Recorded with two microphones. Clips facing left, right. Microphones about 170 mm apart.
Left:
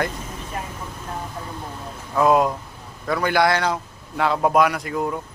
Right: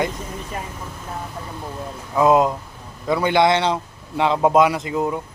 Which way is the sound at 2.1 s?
20° right (ahead or behind).